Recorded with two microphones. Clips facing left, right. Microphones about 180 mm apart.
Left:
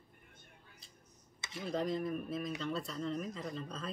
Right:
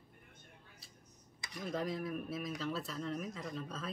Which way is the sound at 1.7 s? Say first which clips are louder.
Left 3 dB; 5° right (ahead or behind).